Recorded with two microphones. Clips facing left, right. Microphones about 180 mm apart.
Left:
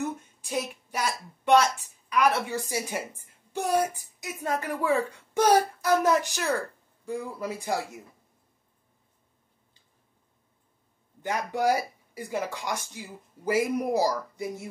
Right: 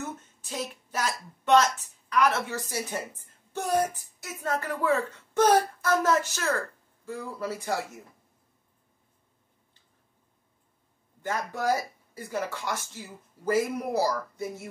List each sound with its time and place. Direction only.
0.0 s speech: 15° left (ahead or behind)
11.2 s speech: 15° left (ahead or behind)